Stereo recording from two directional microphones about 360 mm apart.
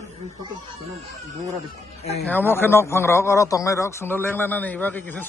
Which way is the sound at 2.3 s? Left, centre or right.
Centre.